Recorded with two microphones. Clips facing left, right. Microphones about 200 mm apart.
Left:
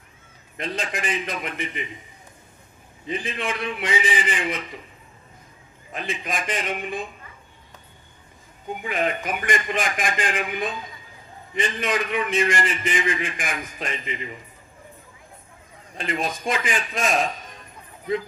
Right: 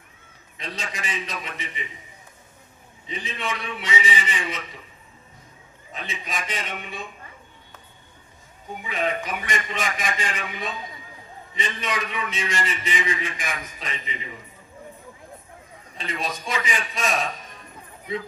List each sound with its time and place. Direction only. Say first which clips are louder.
0.5 s a man's voice: left 6 dB; 55° left (ahead or behind)
3.1 s a man's voice: left 3 dB; 50° left (ahead or behind)
6.2 s a man's voice: left 4 dB; 50° left (ahead or behind)
8.8 s a man's voice: left 1 dB; 50° left (ahead or behind)
16.0 s a man's voice: left 3 dB; 50° left (ahead or behind)